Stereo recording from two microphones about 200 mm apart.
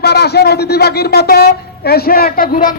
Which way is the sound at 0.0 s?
55° left (ahead or behind).